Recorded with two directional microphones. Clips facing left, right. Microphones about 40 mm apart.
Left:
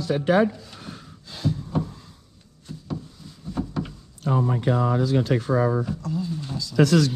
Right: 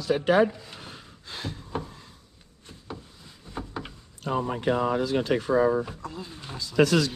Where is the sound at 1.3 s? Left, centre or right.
Right.